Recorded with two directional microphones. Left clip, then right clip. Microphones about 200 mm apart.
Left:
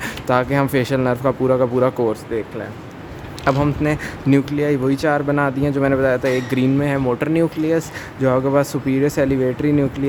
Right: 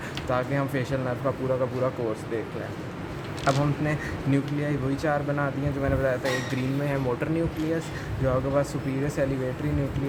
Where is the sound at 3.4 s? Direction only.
55° left (ahead or behind).